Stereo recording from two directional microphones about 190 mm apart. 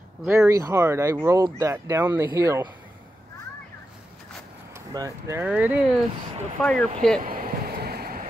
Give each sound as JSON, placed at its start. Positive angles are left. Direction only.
{"t": 0.2, "sound": "speech", "side_deg": -10}
{"t": 4.9, "sound": "speech", "side_deg": -15}
{"t": 6.6, "sound": "speech", "side_deg": 5}
{"t": 7.2, "sound": "vehicle", "side_deg": -50}